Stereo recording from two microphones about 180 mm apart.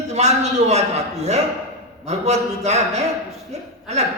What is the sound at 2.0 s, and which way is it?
A man's voice, 40° right (ahead or behind).